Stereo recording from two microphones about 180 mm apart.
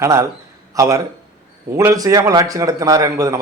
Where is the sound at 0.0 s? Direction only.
15° right (ahead or behind).